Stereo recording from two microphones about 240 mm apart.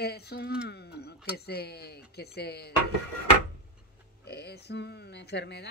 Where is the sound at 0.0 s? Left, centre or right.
Left.